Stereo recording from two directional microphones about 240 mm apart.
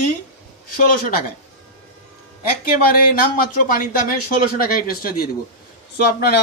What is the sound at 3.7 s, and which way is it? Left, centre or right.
Speech, left.